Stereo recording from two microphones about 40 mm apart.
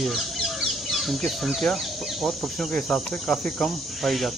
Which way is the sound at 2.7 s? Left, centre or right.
Centre.